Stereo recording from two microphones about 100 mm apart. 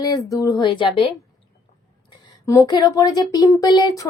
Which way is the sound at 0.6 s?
55° left (ahead or behind).